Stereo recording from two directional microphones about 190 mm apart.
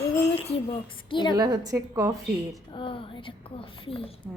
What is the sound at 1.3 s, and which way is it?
Speech, 20° right (ahead or behind).